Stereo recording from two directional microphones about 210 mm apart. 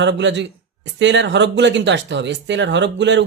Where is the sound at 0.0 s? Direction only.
60° right (ahead or behind).